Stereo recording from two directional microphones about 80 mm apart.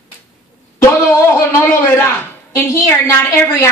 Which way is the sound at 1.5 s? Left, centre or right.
Left.